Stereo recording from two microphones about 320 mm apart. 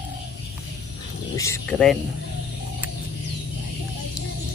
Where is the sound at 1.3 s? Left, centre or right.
Centre.